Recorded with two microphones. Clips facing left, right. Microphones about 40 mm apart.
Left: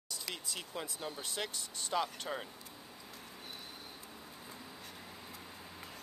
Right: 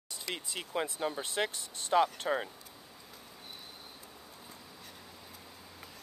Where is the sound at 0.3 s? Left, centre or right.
Right.